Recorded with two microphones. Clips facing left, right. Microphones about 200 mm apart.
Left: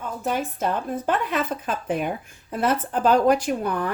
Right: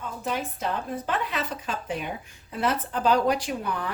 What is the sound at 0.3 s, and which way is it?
A woman's voice, 50° left (ahead or behind).